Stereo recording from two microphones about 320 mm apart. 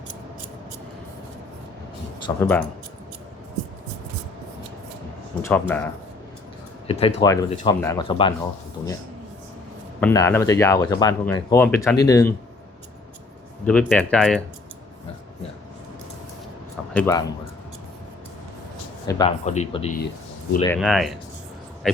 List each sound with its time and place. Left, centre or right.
2.2 s speech: centre
5.4 s speech: centre
10.0 s speech: centre
13.7 s speech: centre
16.9 s speech: centre
19.0 s speech: centre
20.7 s speech: centre